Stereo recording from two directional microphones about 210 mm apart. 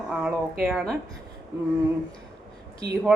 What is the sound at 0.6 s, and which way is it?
Speech, centre (ahead or behind).